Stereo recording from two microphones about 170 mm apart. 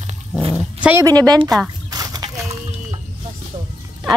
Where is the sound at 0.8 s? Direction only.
20° right (ahead or behind).